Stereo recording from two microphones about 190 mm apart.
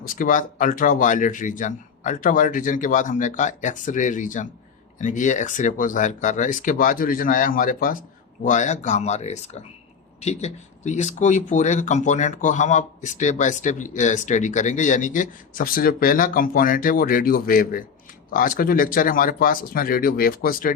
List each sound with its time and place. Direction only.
0.2 s speech: 45° left (ahead or behind)